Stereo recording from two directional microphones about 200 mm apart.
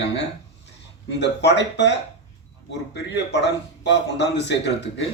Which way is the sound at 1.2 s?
60° left (ahead or behind).